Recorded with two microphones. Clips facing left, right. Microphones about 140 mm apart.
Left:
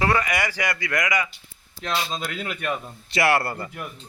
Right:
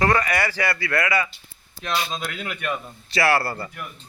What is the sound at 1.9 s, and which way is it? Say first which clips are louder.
Speech: right 1 dB; 30° left (ahead or behind).